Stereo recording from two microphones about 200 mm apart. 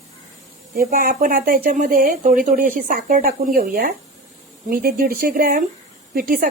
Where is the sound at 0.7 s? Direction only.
45° right (ahead or behind).